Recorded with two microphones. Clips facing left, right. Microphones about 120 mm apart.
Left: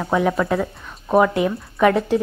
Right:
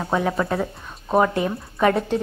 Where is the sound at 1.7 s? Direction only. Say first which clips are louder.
Left 3 dB; centre (ahead or behind).